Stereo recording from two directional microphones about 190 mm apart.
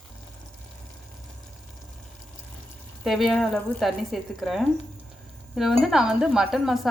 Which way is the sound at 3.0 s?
Centre (ahead or behind).